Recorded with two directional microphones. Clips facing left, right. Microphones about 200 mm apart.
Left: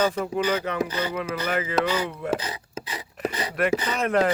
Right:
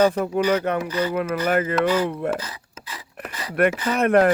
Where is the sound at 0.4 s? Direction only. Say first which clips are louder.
Right 4 dB; 45° right (ahead or behind).